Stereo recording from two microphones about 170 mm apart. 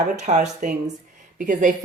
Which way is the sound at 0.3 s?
40° right (ahead or behind).